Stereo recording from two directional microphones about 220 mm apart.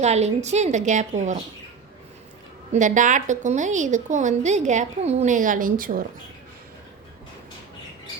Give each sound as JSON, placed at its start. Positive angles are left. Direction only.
{"t": 0.0, "sound": "a woman's voice", "side_deg": -30}
{"t": 2.7, "sound": "a woman's voice", "side_deg": -35}